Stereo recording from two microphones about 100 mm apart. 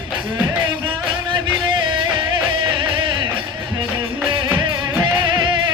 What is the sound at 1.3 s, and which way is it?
Music, 55° right (ahead or behind).